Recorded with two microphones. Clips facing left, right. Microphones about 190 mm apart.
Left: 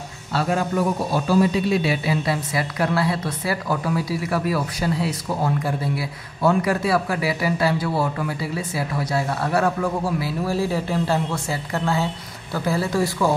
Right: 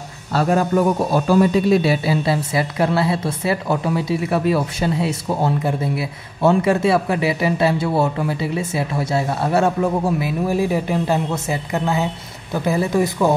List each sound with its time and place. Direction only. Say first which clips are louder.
0.3 s a man's voice: right 5 dB; 45° right (ahead or behind); by 13.3 s 20° right (ahead or behind)